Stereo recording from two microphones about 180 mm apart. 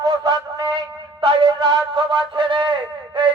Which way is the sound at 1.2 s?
25° right (ahead or behind).